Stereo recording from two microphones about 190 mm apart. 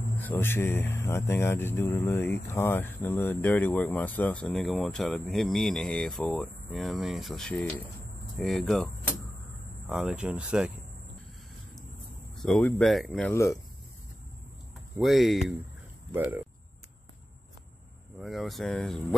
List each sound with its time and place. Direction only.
0.2 s speech: 10° left (ahead or behind)
9.8 s speech: 5° right (ahead or behind)
12.4 s speech: centre (ahead or behind)
13.3 s speech: 15° left (ahead or behind)
15.0 s speech: centre (ahead or behind)
18.2 s speech: centre (ahead or behind)